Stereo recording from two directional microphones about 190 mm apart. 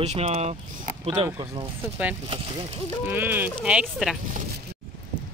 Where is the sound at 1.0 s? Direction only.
25° right (ahead or behind).